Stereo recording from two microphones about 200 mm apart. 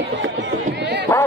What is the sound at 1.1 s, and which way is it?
Dog, 10° left (ahead or behind).